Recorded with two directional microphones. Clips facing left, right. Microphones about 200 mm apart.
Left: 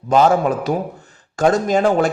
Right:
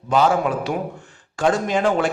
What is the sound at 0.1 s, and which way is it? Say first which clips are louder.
A man's voice: left 4 dB; 40° left (ahead or behind).